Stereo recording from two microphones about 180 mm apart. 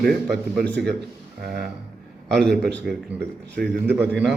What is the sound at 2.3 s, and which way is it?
A man's voice, 5° left (ahead or behind).